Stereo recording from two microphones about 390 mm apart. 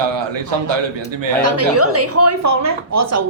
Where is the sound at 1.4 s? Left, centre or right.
Right.